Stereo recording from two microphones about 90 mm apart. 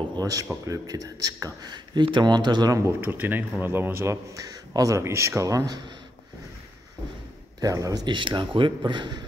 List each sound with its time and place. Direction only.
0.1 s a man's voice: 45° right (ahead or behind)
3.0 s a man's voice: 20° right (ahead or behind); by 5.9 s 50° right (ahead or behind)
7.6 s speech: 40° right (ahead or behind); by 9.2 s 60° right (ahead or behind)